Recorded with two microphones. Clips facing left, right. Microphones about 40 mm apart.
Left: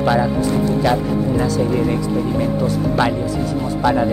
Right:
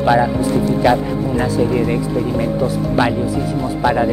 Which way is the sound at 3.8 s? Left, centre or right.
Centre.